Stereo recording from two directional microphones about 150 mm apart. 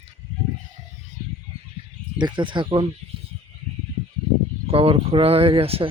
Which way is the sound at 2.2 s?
30° right (ahead or behind).